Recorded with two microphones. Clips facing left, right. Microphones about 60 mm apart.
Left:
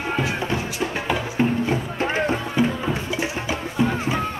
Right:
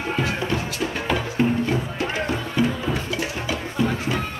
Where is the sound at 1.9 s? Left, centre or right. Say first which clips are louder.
Left 3 dB; left.